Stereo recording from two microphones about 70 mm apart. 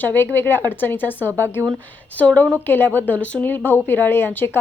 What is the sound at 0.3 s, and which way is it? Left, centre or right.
Speech, left.